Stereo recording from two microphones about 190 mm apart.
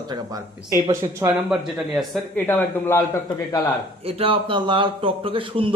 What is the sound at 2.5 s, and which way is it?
Speech, 10° left (ahead or behind).